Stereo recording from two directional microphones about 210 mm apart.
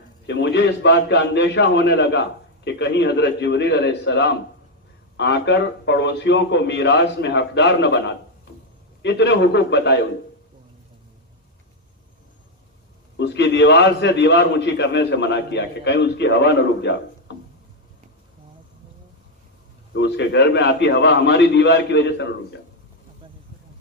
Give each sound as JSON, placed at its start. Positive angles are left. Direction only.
{"t": 0.3, "sound": "a man's voice", "side_deg": 55}
{"t": 9.0, "sound": "a man's voice", "side_deg": 55}
{"t": 13.1, "sound": "a man's voice", "side_deg": 55}
{"t": 19.9, "sound": "a man's voice", "side_deg": 60}